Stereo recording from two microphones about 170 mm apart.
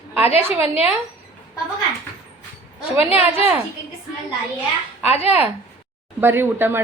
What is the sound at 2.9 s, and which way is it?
Speech, 35° left (ahead or behind).